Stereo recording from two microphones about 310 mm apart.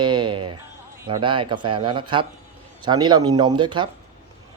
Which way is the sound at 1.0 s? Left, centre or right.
Centre.